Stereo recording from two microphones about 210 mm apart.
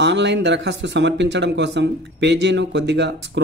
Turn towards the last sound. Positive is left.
turn(degrees=-55)  # may be behind; listen again after turning